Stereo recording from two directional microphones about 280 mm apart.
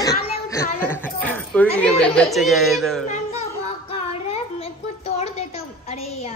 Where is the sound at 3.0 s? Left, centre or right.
Left.